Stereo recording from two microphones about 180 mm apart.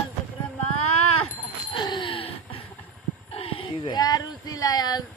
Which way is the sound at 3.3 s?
30° left (ahead or behind).